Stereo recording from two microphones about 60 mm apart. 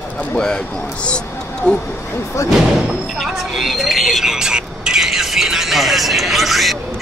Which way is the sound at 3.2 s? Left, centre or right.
Centre.